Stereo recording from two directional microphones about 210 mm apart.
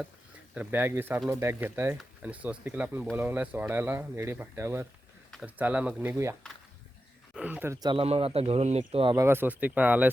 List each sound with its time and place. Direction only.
0.5 s speech: 10° right (ahead or behind)
7.3 s speech: 5° right (ahead or behind); by 9.2 s 25° right (ahead or behind)
9.2 s speech: 10° right (ahead or behind)